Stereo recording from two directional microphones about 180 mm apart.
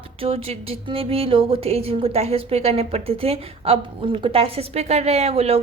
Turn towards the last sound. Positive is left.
turn(degrees=-35)  # may be behind; listen again after turning